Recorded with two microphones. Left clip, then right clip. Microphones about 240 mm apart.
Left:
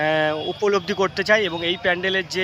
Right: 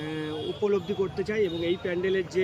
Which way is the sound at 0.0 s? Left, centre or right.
Left.